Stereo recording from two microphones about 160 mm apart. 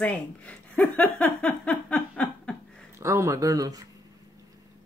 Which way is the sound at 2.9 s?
20° right (ahead or behind).